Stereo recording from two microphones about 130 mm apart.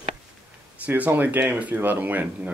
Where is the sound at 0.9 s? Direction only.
15° right (ahead or behind).